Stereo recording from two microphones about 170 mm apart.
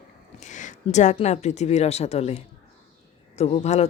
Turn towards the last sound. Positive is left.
turn(degrees=40)  # may be behind; listen again after turning